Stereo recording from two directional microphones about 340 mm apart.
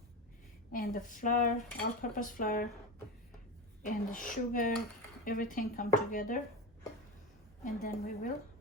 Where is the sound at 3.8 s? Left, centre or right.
Left.